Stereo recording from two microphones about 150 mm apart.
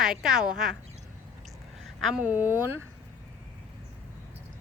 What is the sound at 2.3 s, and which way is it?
Speech, 15° right (ahead or behind).